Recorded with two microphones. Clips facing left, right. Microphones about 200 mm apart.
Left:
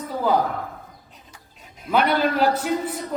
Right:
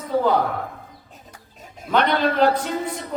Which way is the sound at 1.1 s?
45° right (ahead or behind).